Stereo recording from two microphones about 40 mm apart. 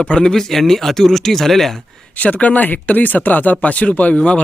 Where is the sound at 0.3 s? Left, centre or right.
Centre.